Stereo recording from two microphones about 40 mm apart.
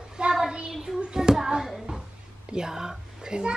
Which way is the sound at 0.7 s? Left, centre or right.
Centre.